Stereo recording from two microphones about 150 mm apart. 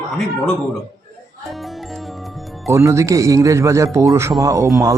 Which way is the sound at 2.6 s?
20° right (ahead or behind).